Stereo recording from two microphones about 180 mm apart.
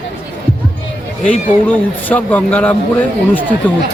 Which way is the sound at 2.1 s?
10° left (ahead or behind).